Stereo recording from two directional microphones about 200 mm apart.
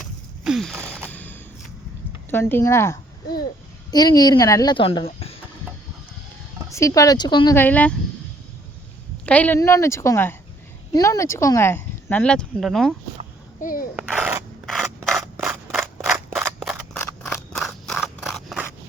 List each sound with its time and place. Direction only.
0.0 s gasp: centre (ahead or behind)
1.1 s a sound: 10° left (ahead or behind)
2.3 s a woman's voice: 10° left (ahead or behind); by 5.4 s 30° left (ahead or behind)
6.7 s a woman's voice: 15° left (ahead or behind)
7.5 s speech: 10° left (ahead or behind)
9.2 s speech: 5° left (ahead or behind)
13.6 s a child's voice: 45° left (ahead or behind)
13.9 s mechanisms: 10° right (ahead or behind)
15.4 s a sound: 5° right (ahead or behind)